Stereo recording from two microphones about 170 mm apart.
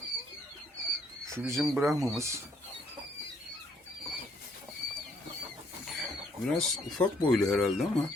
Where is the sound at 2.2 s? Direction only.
15° right (ahead or behind).